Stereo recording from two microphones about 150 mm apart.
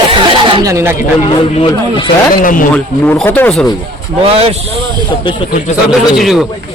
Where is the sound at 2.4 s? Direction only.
65° left (ahead or behind).